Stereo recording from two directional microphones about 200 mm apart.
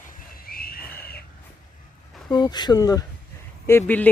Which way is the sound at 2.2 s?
20° left (ahead or behind).